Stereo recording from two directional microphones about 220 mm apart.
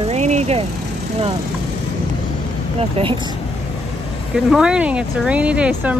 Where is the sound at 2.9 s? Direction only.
25° right (ahead or behind).